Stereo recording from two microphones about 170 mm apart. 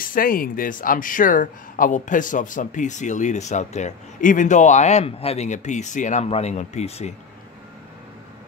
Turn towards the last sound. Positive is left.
turn(degrees=40)  # may be behind; listen again after turning